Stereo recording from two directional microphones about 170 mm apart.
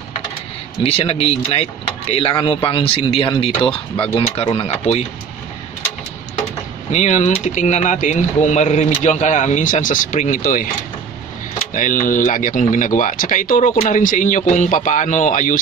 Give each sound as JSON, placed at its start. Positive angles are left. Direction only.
{"t": 0.8, "sound": "speech", "side_deg": 35}
{"t": 6.9, "sound": "speech", "side_deg": 45}
{"t": 11.7, "sound": "speech", "side_deg": 50}